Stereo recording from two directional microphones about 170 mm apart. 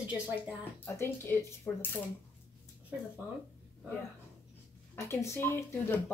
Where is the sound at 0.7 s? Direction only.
10° left (ahead or behind).